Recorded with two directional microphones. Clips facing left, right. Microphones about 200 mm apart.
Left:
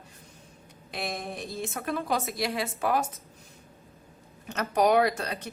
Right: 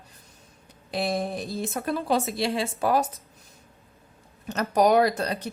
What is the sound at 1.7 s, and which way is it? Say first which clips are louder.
A woman's voice: right 4 dB; 35° right (ahead or behind).